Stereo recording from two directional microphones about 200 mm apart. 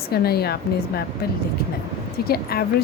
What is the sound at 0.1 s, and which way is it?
Speech, 50° left (ahead or behind).